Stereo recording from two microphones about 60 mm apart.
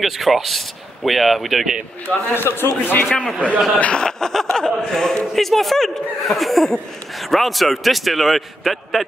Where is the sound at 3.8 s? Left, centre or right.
Centre.